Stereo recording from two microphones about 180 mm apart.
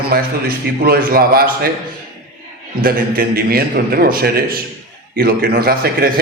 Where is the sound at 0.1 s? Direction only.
55° right (ahead or behind).